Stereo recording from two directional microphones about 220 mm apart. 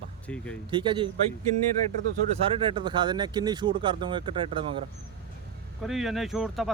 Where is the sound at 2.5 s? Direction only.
20° right (ahead or behind).